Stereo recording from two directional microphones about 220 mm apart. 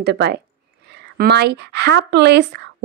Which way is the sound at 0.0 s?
50° right (ahead or behind).